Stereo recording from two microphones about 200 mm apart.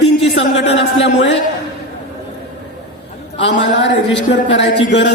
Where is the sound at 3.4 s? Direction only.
65° left (ahead or behind).